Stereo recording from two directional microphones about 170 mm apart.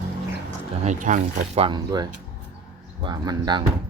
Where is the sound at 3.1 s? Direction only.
25° right (ahead or behind).